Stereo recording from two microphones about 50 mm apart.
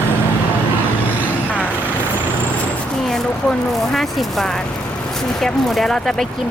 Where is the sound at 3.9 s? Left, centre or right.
Centre.